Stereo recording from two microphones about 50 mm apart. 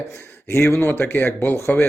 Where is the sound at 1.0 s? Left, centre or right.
Left.